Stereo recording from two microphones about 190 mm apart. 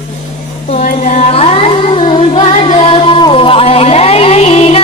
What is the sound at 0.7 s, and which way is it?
Singing, 40° left (ahead or behind).